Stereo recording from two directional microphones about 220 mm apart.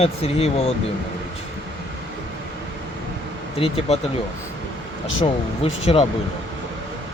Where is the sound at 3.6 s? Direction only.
25° left (ahead or behind).